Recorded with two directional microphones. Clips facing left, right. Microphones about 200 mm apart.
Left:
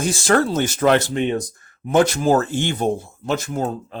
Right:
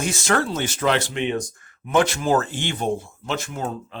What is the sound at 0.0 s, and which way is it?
Speech, 30° left (ahead or behind).